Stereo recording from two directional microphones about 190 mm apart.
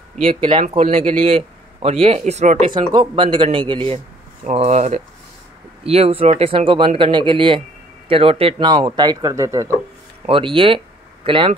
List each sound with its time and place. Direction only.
0.2 s a man's voice: 30° right (ahead or behind)
2.7 s a man's voice: 25° right (ahead or behind)
10.2 s speech: 30° right (ahead or behind)